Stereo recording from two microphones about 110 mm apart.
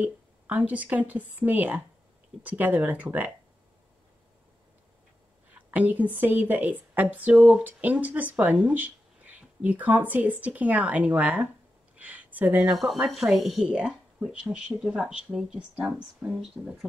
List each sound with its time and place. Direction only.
0.0 s speech: 15° right (ahead or behind)
5.7 s speech: 15° right (ahead or behind)
12.6 s speech: centre (ahead or behind)